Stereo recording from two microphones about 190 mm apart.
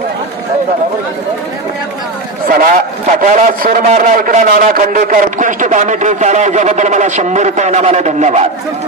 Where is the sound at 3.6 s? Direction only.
45° right (ahead or behind).